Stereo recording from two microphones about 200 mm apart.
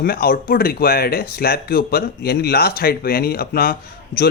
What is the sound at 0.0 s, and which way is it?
Speech, 50° left (ahead or behind).